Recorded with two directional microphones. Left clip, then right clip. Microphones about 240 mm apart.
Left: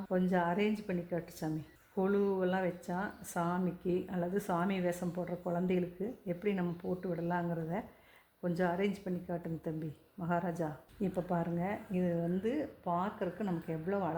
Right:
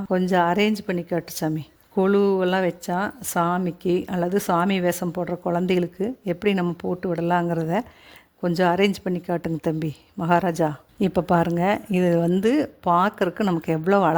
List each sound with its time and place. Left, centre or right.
0.1 s a woman's voice: right